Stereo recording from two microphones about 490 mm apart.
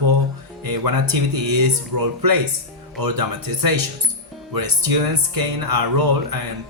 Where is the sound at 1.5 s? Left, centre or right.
Right.